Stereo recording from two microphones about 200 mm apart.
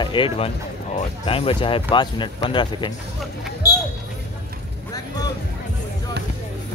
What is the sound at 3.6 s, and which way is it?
Basketball bounce, 15° left (ahead or behind).